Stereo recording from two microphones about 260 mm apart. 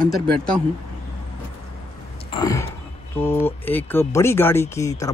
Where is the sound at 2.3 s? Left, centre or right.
Centre.